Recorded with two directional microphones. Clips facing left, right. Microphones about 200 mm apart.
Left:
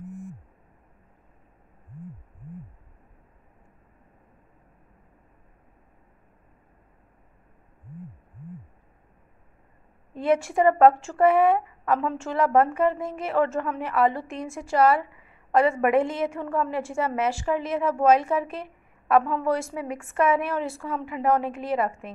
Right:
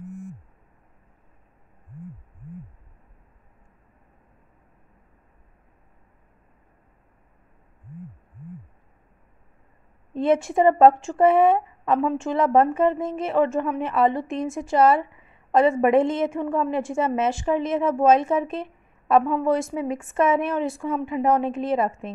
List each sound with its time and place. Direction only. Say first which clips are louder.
10.1 s a woman's voice: right 2 dB; 25° right (ahead or behind)